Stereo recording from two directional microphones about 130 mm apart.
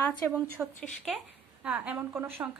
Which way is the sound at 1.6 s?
10° right (ahead or behind).